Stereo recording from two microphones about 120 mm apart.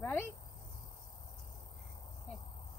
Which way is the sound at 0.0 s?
20° left (ahead or behind).